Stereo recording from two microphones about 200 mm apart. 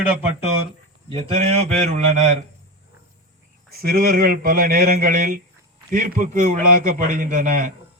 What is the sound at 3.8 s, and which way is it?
A man's voice, 50° right (ahead or behind).